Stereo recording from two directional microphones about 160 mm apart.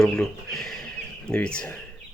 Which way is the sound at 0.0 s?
5° left (ahead or behind).